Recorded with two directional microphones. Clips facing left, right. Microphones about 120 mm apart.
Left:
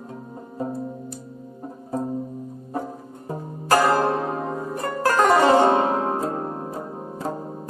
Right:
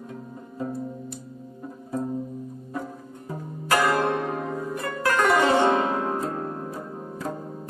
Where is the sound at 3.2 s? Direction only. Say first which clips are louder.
Left 4 dB; 35° left (ahead or behind).